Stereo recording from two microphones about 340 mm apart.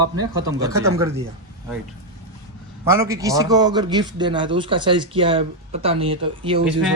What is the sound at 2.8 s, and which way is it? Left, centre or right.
A man's voice, centre.